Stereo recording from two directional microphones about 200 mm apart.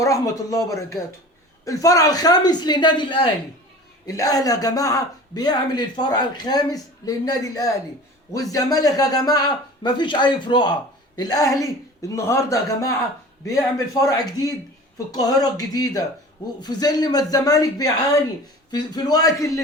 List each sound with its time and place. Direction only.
0.0 s a man's voice: 15° left (ahead or behind)